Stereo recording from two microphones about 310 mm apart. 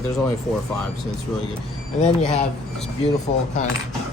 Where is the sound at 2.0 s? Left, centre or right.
Left.